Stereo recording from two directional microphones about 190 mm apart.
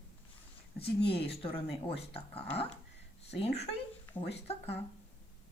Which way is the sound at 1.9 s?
30° left (ahead or behind).